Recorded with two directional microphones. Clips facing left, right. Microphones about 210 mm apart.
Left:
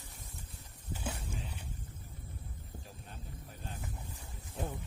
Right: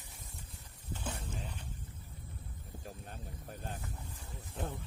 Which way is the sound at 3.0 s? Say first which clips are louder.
Right 2 dB; 50° right (ahead or behind).